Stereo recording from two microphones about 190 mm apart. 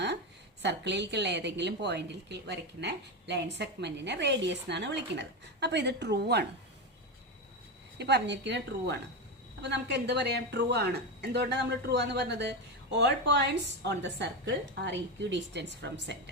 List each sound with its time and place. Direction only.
0.6 s speech: 65° right (ahead or behind)
7.9 s speech: 65° right (ahead or behind)